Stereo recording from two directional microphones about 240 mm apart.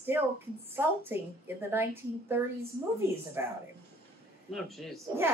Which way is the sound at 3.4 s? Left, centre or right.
Centre.